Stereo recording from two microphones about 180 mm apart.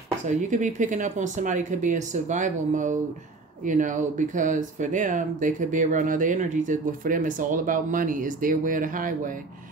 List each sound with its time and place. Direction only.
0.5 s speech: 45° right (ahead or behind)